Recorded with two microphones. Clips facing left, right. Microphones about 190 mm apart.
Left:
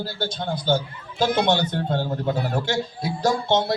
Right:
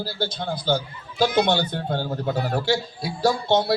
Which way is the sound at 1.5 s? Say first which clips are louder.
Left 1 dB; 20° left (ahead or behind).